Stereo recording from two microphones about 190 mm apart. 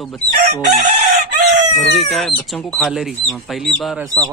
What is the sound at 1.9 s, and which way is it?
Speech, centre (ahead or behind).